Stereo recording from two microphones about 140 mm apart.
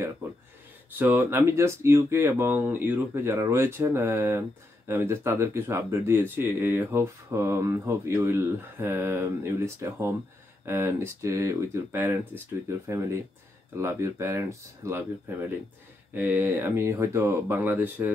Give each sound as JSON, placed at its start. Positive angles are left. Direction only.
{"t": 0.9, "sound": "speech", "side_deg": -15}